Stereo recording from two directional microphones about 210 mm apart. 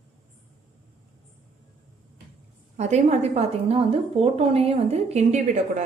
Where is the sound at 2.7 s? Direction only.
35° right (ahead or behind).